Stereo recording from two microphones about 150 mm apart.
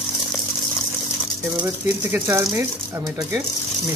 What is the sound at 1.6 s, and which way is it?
Speech, 15° right (ahead or behind).